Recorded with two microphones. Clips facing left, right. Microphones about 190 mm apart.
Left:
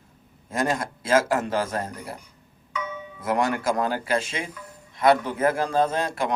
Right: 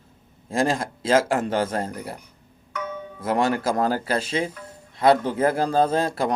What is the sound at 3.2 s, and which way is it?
Speech, 30° right (ahead or behind).